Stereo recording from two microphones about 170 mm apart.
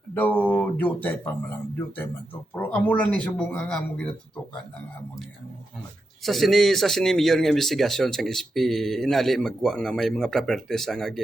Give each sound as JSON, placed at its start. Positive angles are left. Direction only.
{"t": 0.1, "sound": "speech", "side_deg": 10}
{"t": 2.6, "sound": "speech", "side_deg": 10}
{"t": 6.2, "sound": "speech", "side_deg": 0}